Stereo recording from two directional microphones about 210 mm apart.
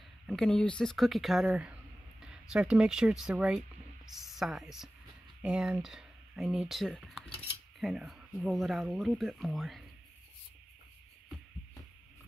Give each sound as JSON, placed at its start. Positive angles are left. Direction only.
{"t": 0.3, "sound": "speech", "side_deg": 5}